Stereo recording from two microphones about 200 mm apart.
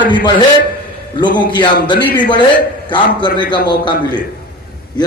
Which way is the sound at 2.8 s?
25° left (ahead or behind).